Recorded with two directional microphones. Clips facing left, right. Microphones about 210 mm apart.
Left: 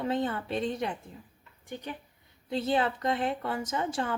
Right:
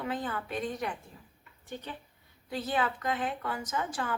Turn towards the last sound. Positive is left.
turn(degrees=25)  # may be behind; listen again after turning